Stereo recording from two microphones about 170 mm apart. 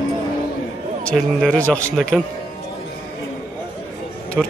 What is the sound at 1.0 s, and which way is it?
A man's voice, 5° left (ahead or behind).